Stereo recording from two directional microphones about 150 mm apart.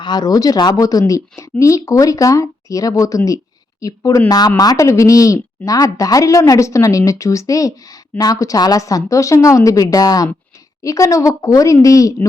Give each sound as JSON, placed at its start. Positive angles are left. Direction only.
{"t": 0.0, "sound": "speech", "side_deg": 25}